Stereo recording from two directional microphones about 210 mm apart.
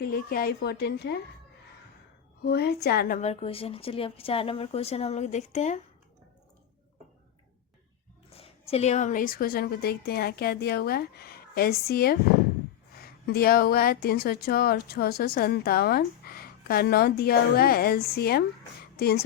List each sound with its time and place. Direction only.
0.0 s speech: 45° left (ahead or behind)
2.4 s speech: 50° left (ahead or behind); by 5.8 s 35° left (ahead or behind)
8.3 s a woman's voice: 30° left (ahead or behind); by 19.2 s 50° left (ahead or behind)